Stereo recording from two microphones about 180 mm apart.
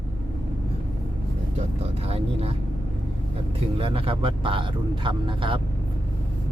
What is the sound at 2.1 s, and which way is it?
Speech, 35° right (ahead or behind).